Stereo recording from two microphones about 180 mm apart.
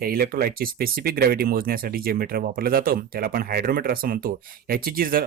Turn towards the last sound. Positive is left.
turn(degrees=-55)  # may be behind; listen again after turning